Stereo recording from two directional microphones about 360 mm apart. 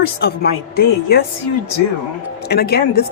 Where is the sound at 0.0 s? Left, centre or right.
Left.